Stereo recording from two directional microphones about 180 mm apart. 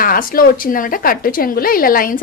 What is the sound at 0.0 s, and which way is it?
Speech, 50° left (ahead or behind).